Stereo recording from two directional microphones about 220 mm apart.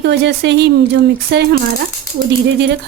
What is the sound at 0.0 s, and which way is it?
Speech, 50° right (ahead or behind).